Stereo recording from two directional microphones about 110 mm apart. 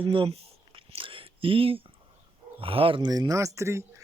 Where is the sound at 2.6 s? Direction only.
55° right (ahead or behind).